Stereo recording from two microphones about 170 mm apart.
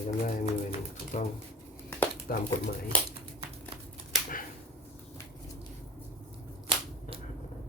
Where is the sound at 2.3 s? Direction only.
60° left (ahead or behind).